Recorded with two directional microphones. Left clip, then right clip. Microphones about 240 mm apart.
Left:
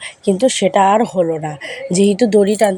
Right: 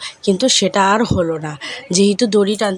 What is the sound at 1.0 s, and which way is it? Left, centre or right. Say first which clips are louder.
Speech: left 2 dB; right.